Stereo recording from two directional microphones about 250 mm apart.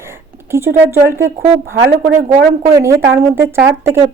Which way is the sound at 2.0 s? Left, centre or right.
Right.